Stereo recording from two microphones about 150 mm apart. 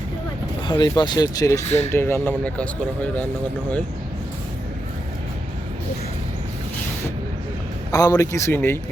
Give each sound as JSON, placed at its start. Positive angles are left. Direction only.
{"t": 0.7, "sound": "a man's voice", "side_deg": 30}
{"t": 7.9, "sound": "a man's voice", "side_deg": 25}